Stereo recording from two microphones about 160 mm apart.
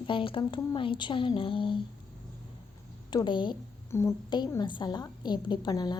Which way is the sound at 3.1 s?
30° left (ahead or behind).